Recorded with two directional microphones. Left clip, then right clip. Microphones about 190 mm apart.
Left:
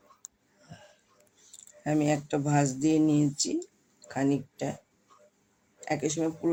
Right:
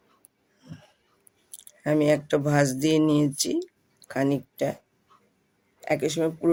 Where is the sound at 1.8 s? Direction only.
55° right (ahead or behind).